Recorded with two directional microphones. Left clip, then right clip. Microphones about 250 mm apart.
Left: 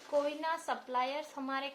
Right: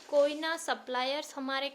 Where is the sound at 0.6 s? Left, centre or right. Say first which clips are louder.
Right 2 dB; right.